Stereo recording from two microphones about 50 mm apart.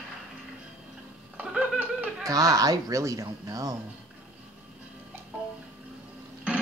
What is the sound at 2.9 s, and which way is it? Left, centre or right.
Speech, right.